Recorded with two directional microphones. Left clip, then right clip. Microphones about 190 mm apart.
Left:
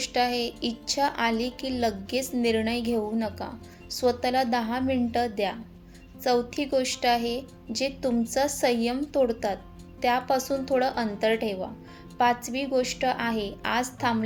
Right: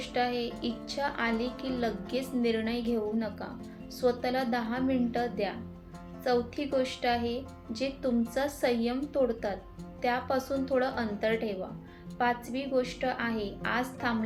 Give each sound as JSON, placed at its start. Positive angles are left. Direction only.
{"t": 0.0, "sound": "a woman's voice", "side_deg": 45}